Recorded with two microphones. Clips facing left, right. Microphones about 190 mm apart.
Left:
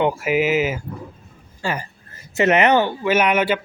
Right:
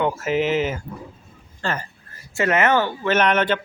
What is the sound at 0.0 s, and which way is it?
Speech, 15° left (ahead or behind).